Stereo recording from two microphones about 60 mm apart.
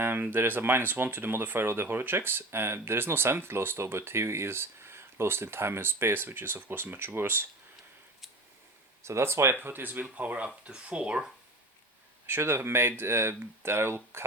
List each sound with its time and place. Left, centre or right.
0.0 s speech: right
9.0 s speech: right; by 11.2 s centre
12.2 s speech: right